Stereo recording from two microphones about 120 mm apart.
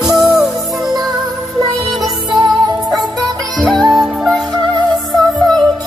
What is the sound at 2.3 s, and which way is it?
Music, 35° right (ahead or behind).